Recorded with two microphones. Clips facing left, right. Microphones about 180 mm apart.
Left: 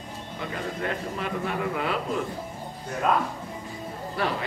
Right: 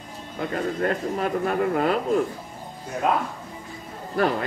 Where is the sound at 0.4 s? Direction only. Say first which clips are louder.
Right 7 dB; 45° right (ahead or behind).